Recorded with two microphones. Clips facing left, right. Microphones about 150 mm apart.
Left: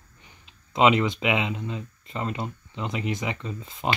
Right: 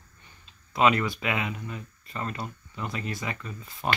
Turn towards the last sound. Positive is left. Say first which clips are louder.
# left 3 dB
turn(degrees=20)  # may be behind; listen again after turning